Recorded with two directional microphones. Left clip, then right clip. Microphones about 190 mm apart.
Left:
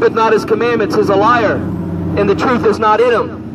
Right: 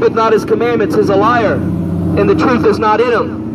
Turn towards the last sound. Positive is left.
turn(degrees=15)  # may be behind; listen again after turning